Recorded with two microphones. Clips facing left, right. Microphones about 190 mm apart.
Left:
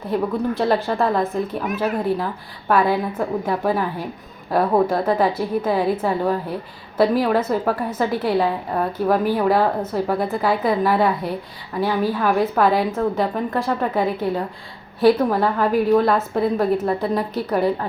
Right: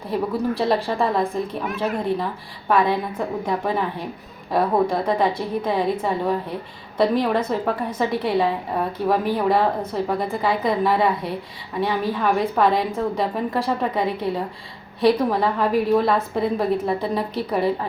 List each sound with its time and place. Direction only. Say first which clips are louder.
0.1 s a woman's voice: left 1 dB; centre (ahead or behind)
4.5 s a woman's voice: left 2 dB; 5° left (ahead or behind)